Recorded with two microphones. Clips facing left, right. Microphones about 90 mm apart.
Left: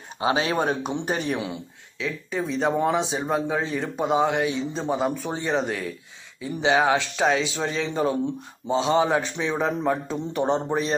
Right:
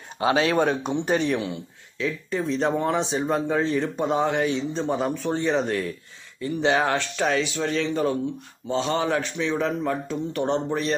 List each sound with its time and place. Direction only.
0.2 s a man's voice: 20° left (ahead or behind)
2.0 s a man's voice: centre (ahead or behind); by 11.0 s 15° left (ahead or behind)